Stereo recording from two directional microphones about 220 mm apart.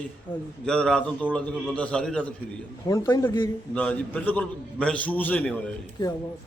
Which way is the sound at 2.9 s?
15° left (ahead or behind).